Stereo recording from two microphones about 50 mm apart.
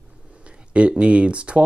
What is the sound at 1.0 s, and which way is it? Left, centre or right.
Speech, right.